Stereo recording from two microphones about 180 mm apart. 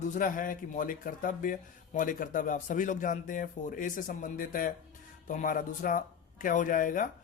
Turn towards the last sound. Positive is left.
turn(degrees=50)  # may be behind; listen again after turning